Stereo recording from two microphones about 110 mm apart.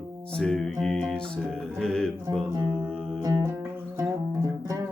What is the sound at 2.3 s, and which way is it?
Music, 35° right (ahead or behind).